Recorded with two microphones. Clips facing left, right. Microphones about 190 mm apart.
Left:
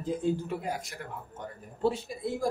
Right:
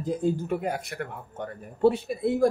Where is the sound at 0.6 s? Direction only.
60° right (ahead or behind).